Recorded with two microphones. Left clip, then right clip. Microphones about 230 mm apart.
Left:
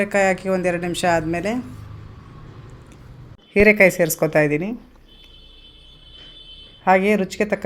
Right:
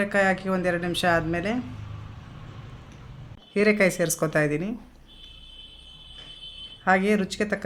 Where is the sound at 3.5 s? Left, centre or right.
Centre.